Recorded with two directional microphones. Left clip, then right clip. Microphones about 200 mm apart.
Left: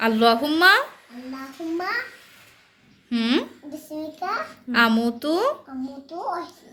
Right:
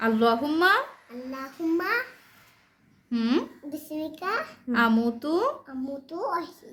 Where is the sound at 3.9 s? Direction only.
30° right (ahead or behind).